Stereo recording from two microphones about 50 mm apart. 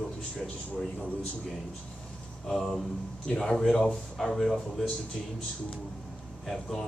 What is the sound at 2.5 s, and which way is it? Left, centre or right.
A man's voice, centre.